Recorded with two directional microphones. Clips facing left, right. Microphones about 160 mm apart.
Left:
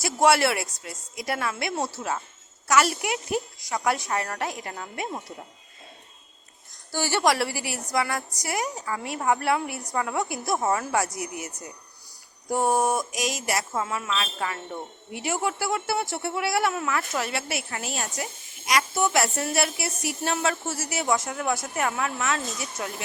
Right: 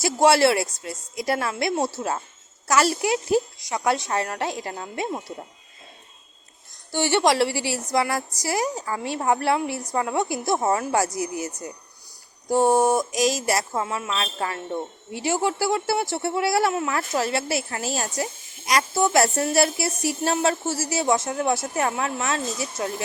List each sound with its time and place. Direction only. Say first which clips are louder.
0.0 s a woman's voice: right 3 dB; 30° right (ahead or behind)
6.9 s a woman's voice: right 3 dB; 25° right (ahead or behind)
13.8 s a woman's voice: right 2 dB; 20° right (ahead or behind)
14.1 s a woman's voice: right 2 dB; 35° right (ahead or behind)